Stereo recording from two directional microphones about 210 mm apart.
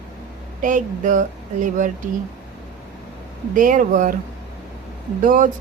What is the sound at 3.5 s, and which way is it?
Speech, 40° right (ahead or behind).